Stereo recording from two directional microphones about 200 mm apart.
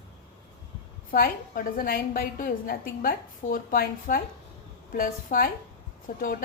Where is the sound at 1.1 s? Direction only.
45° left (ahead or behind).